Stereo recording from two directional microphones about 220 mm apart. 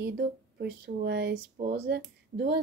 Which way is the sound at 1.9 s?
50° right (ahead or behind).